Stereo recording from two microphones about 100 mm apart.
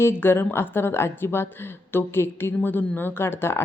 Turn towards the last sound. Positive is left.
turn(degrees=25)  # may be behind; listen again after turning